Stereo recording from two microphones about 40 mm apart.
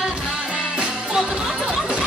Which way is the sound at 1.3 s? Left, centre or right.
Centre.